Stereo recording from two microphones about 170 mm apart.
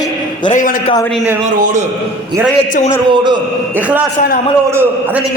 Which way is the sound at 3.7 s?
10° right (ahead or behind).